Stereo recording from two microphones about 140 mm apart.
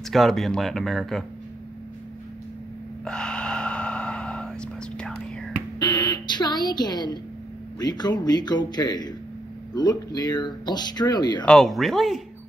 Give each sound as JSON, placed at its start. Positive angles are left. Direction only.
{"t": 0.1, "sound": "speech", "side_deg": 0}
{"t": 3.1, "sound": "gasp", "side_deg": 5}
{"t": 5.8, "sound": "a sound", "side_deg": 30}
{"t": 7.8, "sound": "speech", "side_deg": 30}
{"t": 11.4, "sound": "speech", "side_deg": 5}